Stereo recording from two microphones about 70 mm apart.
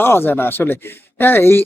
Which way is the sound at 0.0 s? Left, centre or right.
Left.